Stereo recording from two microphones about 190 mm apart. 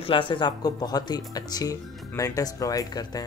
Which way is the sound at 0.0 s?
25° left (ahead or behind).